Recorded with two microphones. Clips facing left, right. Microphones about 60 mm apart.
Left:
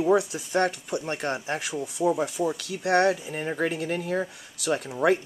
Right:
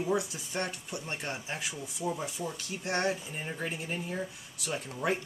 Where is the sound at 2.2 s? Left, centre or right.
Left.